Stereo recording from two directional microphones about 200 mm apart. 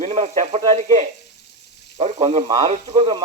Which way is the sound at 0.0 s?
35° right (ahead or behind).